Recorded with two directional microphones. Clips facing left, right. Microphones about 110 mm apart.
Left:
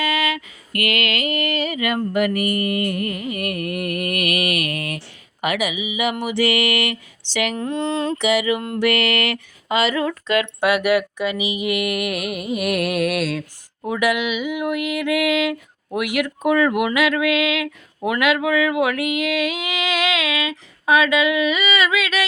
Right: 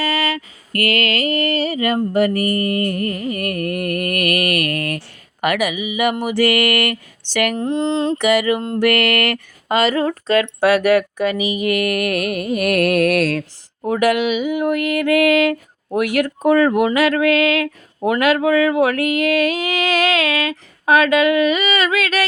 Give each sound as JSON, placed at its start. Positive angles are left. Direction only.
{"t": 0.0, "sound": "mantra", "side_deg": -35}
{"t": 7.5, "sound": "a sound", "side_deg": -30}
{"t": 8.2, "sound": "mantra", "side_deg": -45}
{"t": 16.0, "sound": "speech", "side_deg": -40}